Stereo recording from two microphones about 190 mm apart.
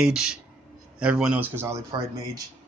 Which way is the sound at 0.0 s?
5° right (ahead or behind).